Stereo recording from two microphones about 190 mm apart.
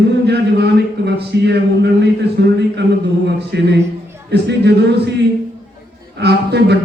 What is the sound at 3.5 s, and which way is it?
Speech, 65° right (ahead or behind).